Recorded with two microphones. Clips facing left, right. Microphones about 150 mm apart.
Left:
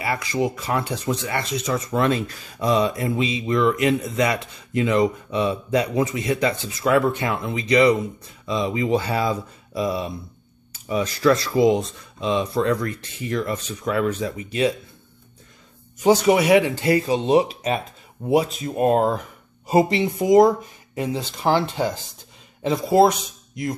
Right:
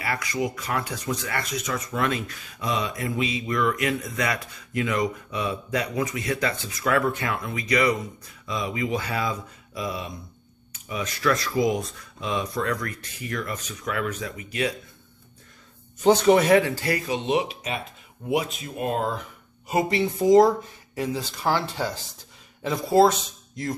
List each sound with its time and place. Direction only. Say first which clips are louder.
0.0 s speech: left 4 dB; 25° left (ahead or behind)
16.0 s speech: left 1 dB; 10° left (ahead or behind); by 19.2 s 45° left (ahead or behind)
19.7 s speech: left 6 dB; 30° left (ahead or behind)
20.0 s speech: right 1 dB; 15° left (ahead or behind)